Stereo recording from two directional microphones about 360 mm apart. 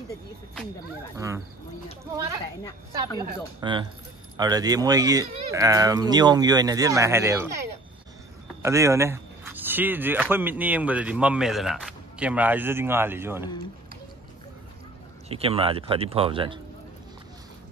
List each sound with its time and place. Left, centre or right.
1.1 s speech: centre
3.2 s speech: centre
8.6 s speech: centre
15.2 s speech: centre